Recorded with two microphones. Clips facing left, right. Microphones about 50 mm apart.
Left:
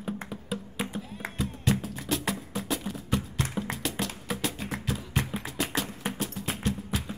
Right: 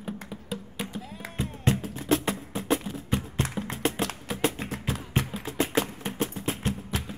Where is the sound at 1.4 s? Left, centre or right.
Right.